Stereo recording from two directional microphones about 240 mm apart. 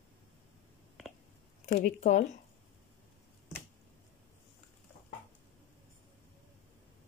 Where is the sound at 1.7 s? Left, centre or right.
Left.